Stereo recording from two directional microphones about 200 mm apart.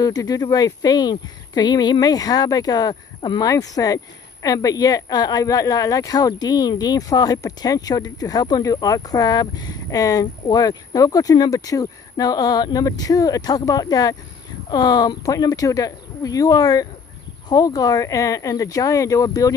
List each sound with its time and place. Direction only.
0.0 s speech: 20° left (ahead or behind)